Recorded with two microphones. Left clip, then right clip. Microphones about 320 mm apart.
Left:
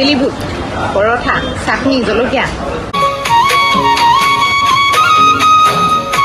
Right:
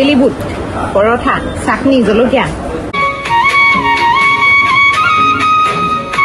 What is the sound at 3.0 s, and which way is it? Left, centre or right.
Music, left.